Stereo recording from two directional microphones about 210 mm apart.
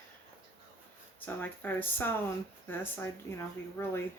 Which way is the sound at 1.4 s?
10° left (ahead or behind).